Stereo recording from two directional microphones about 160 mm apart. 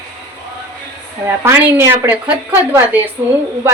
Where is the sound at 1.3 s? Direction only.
15° right (ahead or behind).